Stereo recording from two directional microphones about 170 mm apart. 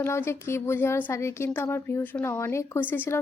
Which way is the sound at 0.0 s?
15° left (ahead or behind).